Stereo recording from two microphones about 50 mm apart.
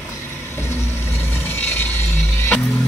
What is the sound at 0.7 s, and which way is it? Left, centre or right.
Vehicle, left.